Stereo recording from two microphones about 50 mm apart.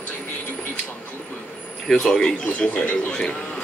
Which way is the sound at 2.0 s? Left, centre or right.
Centre.